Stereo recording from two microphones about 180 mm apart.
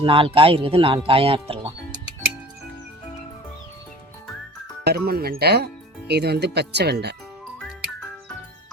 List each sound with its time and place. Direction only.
0.0 s speech: 30° right (ahead or behind)
4.8 s speech: 60° right (ahead or behind)